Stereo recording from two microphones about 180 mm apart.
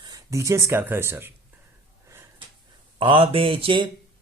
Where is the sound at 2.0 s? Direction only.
15° right (ahead or behind).